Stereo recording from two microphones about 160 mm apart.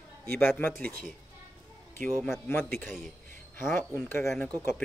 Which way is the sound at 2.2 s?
15° left (ahead or behind).